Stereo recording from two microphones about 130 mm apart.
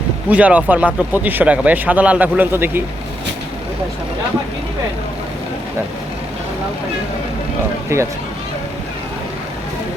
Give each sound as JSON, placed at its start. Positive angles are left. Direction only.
{"t": 0.3, "sound": "speech", "side_deg": -10}
{"t": 7.9, "sound": "speech", "side_deg": -20}